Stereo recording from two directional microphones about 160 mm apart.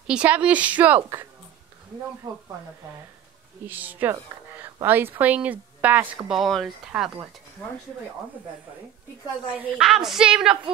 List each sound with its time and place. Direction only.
0.0 s a woman's voice: 5° right (ahead or behind)
2.3 s speech: 25° right (ahead or behind)
3.6 s a woman's voice: 10° right (ahead or behind)
9.6 s a woman's voice: 5° right (ahead or behind)